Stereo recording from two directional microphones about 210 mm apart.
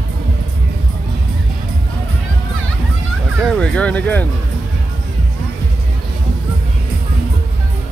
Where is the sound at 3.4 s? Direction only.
5° left (ahead or behind).